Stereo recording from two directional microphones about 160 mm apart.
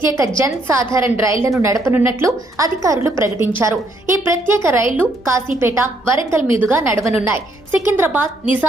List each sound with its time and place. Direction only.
0.3 s a woman's voice: 15° right (ahead or behind)